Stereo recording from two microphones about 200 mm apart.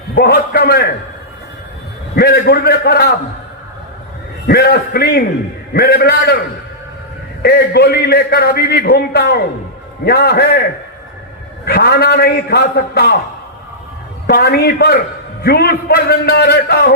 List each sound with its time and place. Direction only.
0.2 s a man's voice: 50° left (ahead or behind)
2.1 s a man's voice: 50° left (ahead or behind)
4.4 s a man's voice: 55° left (ahead or behind)
7.4 s a man's voice: 55° left (ahead or behind)
11.6 s a man's voice: 50° left (ahead or behind)
14.3 s a man's voice: 55° left (ahead or behind)